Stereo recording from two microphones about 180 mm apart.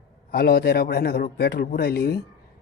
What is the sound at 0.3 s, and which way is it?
A man's voice, 60° left (ahead or behind).